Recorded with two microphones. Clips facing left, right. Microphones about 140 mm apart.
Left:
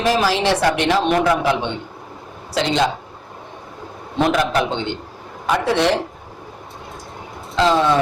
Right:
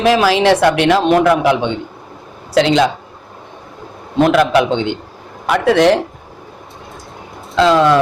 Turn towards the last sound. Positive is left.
turn(degrees=-75)  # may be behind; listen again after turning